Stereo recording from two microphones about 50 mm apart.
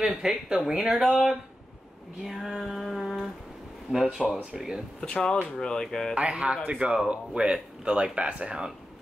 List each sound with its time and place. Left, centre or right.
0.0 s speech: centre
1.0 s a sound: centre
3.9 s speech: centre
5.0 s speech: centre
6.1 s speech: right